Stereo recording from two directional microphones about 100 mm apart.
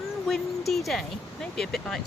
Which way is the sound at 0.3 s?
Centre (ahead or behind).